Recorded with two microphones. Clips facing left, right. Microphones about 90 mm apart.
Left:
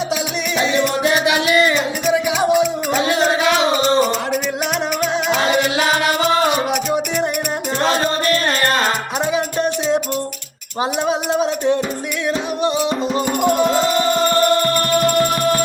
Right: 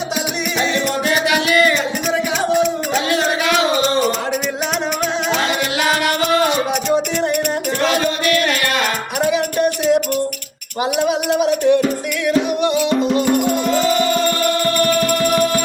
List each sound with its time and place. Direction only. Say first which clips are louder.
1.0 s music: left 1 dB; 20° left (ahead or behind)
1.7 s music: left 1 dB; 10° left (ahead or behind)
3.1 s music: left 2 dB; 20° left (ahead or behind)
7.8 s music: left 2 dB; 35° left (ahead or behind)
9.2 s music: right 3 dB; 25° left (ahead or behind)
11.1 s music: right 2 dB; 25° left (ahead or behind)